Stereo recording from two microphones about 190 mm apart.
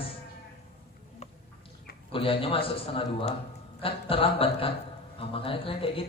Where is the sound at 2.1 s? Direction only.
30° left (ahead or behind).